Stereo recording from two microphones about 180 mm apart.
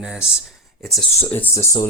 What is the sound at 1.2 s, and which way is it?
Speech, 10° left (ahead or behind).